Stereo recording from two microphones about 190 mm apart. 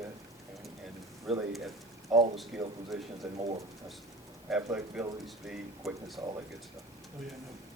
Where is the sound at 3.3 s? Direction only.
35° right (ahead or behind).